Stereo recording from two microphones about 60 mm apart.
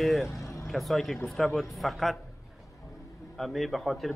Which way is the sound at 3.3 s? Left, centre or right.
Centre.